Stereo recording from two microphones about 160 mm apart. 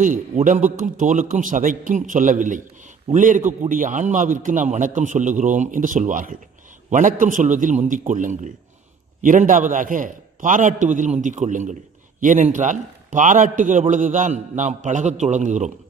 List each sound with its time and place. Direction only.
0.0 s a man's voice: 55° right (ahead or behind)